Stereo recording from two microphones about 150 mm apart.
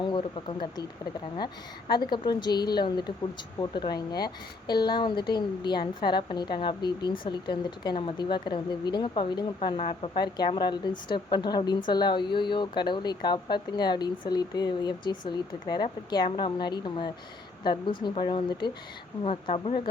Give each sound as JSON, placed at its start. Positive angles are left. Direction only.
{"t": 0.0, "sound": "a woman's voice", "side_deg": 35}
{"t": 1.9, "sound": "a woman's voice", "side_deg": 30}